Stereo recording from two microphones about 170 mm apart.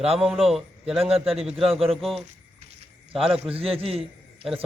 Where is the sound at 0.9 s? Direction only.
35° right (ahead or behind).